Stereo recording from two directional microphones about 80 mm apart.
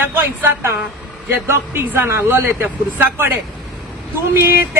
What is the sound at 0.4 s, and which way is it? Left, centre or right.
Speech, right.